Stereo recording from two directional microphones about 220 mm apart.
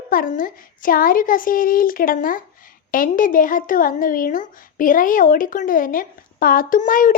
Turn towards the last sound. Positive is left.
turn(degrees=35)  # may be behind; listen again after turning